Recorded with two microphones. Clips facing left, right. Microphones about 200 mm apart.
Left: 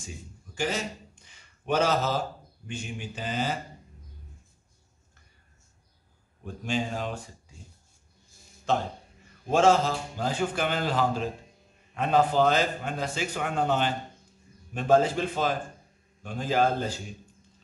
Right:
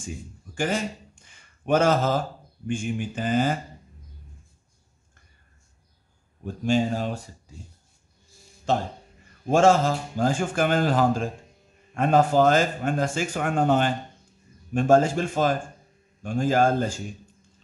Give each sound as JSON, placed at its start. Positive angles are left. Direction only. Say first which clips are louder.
{"t": 0.6, "sound": "speech", "louder": "right 4 dB", "side_deg": -50}
{"t": 6.4, "sound": "a man's voice", "louder": "right 7 dB", "side_deg": -40}
{"t": 9.5, "sound": "a man's voice", "louder": "right 3 dB", "side_deg": -50}